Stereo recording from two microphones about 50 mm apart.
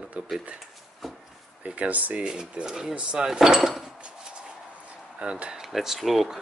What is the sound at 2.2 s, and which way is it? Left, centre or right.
Speech, centre.